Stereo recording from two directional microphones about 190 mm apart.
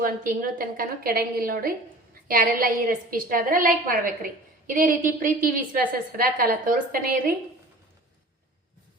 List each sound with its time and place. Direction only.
0.0 s a woman's voice: 50° right (ahead or behind)